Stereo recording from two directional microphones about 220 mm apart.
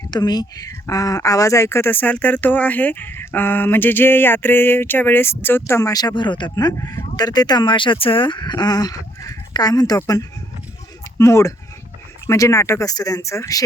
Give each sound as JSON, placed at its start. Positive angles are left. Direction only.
{"t": 0.1, "sound": "speech", "side_deg": 20}